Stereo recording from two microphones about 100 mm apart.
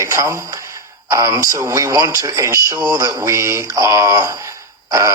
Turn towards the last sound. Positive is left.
turn(degrees=-35)  # may be behind; listen again after turning